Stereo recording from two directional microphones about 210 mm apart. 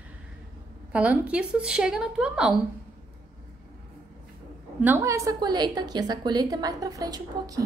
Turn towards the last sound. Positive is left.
turn(degrees=-15)  # may be behind; listen again after turning